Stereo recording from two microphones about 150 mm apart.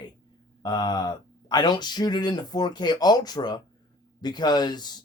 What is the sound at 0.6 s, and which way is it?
Speech, 25° left (ahead or behind).